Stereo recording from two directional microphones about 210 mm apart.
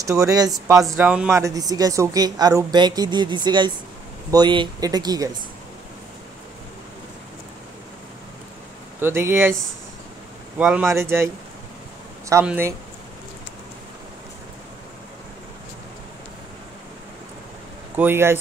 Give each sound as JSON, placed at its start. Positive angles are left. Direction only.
{"t": 0.0, "sound": "speech", "side_deg": -15}
{"t": 9.0, "sound": "speech", "side_deg": -10}
{"t": 10.6, "sound": "speech", "side_deg": -5}
{"t": 12.3, "sound": "speech", "side_deg": -10}
{"t": 17.9, "sound": "speech", "side_deg": -10}